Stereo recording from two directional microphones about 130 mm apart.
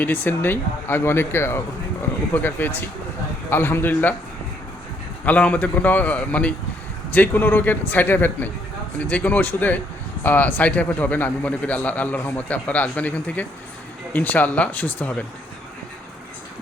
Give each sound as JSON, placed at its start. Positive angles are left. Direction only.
{"t": 0.0, "sound": "a man's voice", "side_deg": 15}
{"t": 5.2, "sound": "a man's voice", "side_deg": 10}